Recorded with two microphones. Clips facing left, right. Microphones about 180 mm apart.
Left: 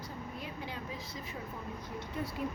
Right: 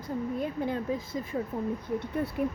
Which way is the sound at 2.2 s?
60° right (ahead or behind).